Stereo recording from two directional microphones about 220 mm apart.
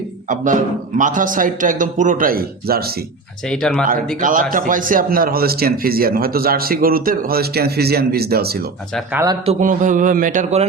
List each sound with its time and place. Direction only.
0.3 s a man's voice: 35° right (ahead or behind)
3.5 s speech: 5° left (ahead or behind)
4.2 s a man's voice: 35° right (ahead or behind)
9.1 s a man's voice: 15° right (ahead or behind)
9.5 s a man's voice: 35° right (ahead or behind)